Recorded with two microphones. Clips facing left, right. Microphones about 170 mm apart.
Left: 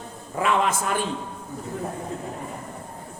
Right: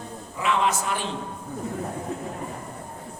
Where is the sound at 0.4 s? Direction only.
50° left (ahead or behind).